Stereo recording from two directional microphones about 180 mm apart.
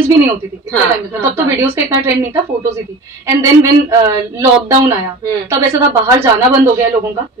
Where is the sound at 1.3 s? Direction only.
15° right (ahead or behind).